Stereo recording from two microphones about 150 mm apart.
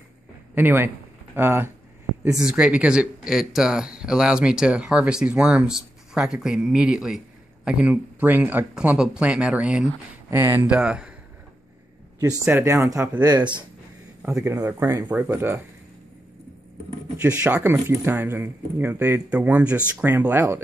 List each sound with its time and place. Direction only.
0.6 s speech: 15° right (ahead or behind)
12.2 s speech: 15° right (ahead or behind)
13.2 s speech: 30° right (ahead or behind)
14.4 s speech: 20° right (ahead or behind)
17.2 s speech: 10° right (ahead or behind)